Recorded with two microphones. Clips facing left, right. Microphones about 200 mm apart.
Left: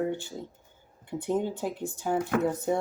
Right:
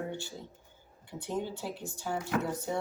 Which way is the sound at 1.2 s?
55° left (ahead or behind).